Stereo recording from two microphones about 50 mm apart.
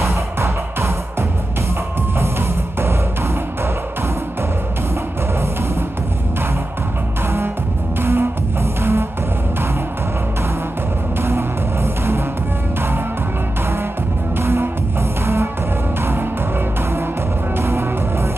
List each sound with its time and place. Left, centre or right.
0.0 s music: right
7.2 s music: right
11.1 s music: right
14.4 s music: right
16.0 s music: right
17.6 s music: right